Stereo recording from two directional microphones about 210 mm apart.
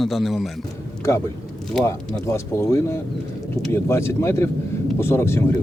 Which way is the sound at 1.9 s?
10° left (ahead or behind).